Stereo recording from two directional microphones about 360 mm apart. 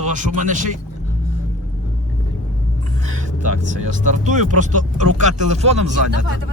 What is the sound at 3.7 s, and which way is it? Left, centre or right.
Speech, right.